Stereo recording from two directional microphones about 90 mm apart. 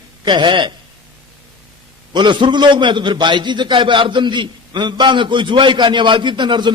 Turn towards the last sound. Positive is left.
turn(degrees=-60)  # may be behind; listen again after turning